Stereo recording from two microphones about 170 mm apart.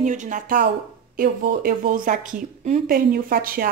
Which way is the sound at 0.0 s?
45° right (ahead or behind).